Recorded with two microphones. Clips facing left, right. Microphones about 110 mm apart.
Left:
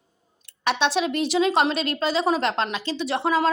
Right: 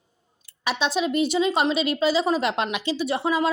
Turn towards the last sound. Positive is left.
turn(degrees=0)  # may be behind; listen again after turning